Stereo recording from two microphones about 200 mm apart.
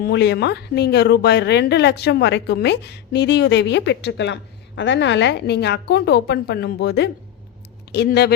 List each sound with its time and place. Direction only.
0.0 s speech: 60° left (ahead or behind)